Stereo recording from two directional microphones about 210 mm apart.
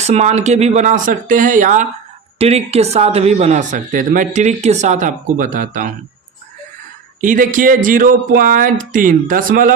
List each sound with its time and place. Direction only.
0.0 s speech: 30° right (ahead or behind)
7.2 s speech: 40° right (ahead or behind)